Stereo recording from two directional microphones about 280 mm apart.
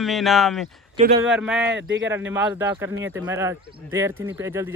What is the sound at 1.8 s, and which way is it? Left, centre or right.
Speech, right.